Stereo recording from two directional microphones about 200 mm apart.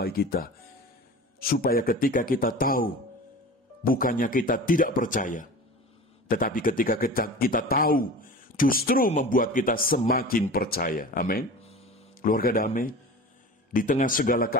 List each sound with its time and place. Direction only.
0.0 s a man's voice: 50° left (ahead or behind)
1.5 s a man's voice: 45° left (ahead or behind)